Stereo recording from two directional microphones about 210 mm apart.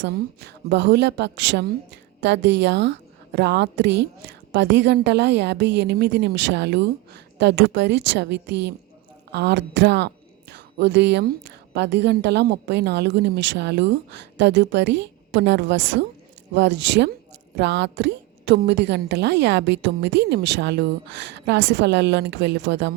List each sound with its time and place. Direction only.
0.0 s a woman's voice: 50° right (ahead or behind)